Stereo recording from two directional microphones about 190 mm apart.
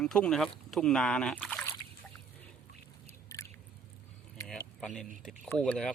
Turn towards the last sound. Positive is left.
turn(degrees=5)  # may be behind; listen again after turning